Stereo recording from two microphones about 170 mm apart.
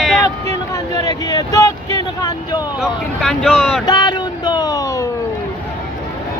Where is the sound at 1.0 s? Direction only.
20° left (ahead or behind).